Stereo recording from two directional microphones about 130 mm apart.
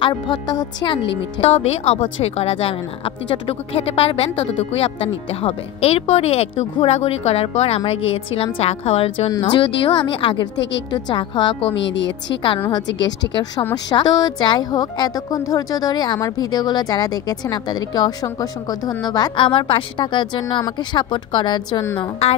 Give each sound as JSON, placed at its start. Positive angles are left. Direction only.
{"t": 0.0, "sound": "a woman's voice", "side_deg": 35}
{"t": 1.4, "sound": "speech", "side_deg": 55}
{"t": 9.3, "sound": "a woman's voice", "side_deg": 30}
{"t": 9.6, "sound": "a woman's voice", "side_deg": 40}
{"t": 12.7, "sound": "a woman's voice", "side_deg": 30}